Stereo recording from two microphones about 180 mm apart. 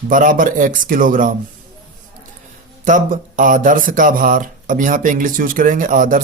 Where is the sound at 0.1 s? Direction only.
50° right (ahead or behind).